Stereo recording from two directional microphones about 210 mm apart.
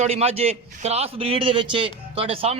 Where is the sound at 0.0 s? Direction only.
30° right (ahead or behind).